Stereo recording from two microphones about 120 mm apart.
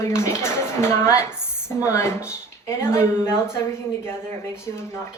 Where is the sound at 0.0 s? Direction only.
20° left (ahead or behind).